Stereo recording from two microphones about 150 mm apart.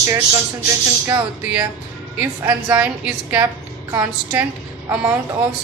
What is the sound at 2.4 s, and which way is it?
A woman's voice, 15° right (ahead or behind).